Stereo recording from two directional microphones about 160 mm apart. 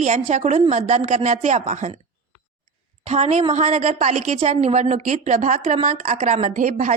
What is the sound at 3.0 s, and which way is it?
A woman's voice, 40° right (ahead or behind).